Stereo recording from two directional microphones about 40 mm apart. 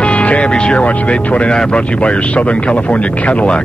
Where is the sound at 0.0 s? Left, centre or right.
Left.